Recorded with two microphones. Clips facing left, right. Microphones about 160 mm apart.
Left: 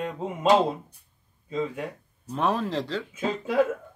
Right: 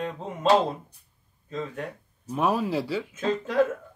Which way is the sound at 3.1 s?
10° left (ahead or behind).